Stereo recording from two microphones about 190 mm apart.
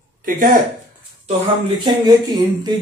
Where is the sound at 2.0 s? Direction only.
20° right (ahead or behind).